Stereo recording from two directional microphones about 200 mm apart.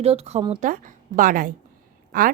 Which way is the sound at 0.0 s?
30° right (ahead or behind).